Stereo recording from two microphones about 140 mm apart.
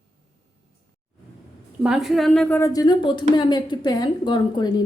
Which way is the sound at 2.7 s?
30° left (ahead or behind).